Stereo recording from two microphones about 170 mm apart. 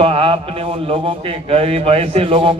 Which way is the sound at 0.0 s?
35° right (ahead or behind).